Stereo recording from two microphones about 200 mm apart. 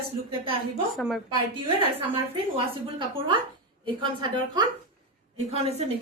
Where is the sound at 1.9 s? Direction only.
25° right (ahead or behind).